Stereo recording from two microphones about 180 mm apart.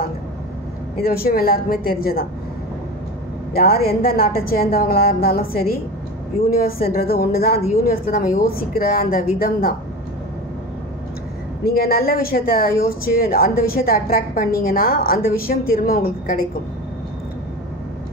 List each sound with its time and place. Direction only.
1.0 s speech: 55° left (ahead or behind)
3.5 s speech: 55° left (ahead or behind)
11.6 s speech: 55° left (ahead or behind)